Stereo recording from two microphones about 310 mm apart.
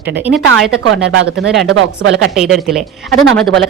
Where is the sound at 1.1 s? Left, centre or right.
Right.